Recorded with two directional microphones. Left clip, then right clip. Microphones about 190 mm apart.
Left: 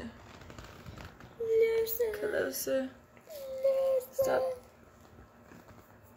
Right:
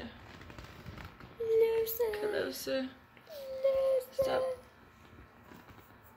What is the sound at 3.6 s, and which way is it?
Child singing, 20° right (ahead or behind).